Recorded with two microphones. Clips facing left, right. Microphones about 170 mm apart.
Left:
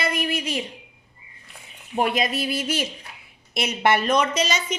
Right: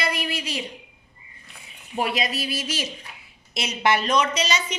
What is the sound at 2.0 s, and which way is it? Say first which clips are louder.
A woman's voice: left 3 dB; 50° left (ahead or behind).